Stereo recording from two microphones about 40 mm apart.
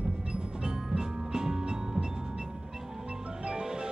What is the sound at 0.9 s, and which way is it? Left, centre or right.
Music, centre.